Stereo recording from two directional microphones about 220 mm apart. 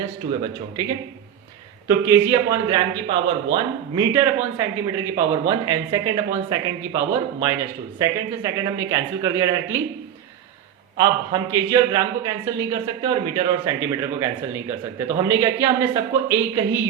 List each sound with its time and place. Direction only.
0.3 s a man's voice: 20° right (ahead or behind)
4.1 s a man's voice: 10° right (ahead or behind)
10.9 s a man's voice: 20° right (ahead or behind)